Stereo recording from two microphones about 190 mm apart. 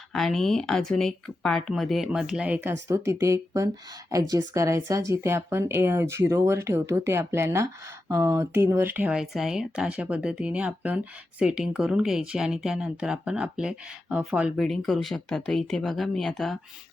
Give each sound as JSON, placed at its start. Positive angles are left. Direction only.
{"t": 0.1, "sound": "speech", "side_deg": 0}